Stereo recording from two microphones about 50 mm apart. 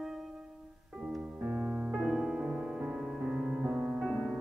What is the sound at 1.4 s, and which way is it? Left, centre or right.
Music, centre.